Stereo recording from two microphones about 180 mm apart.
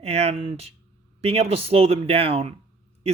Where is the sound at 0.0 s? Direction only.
35° right (ahead or behind).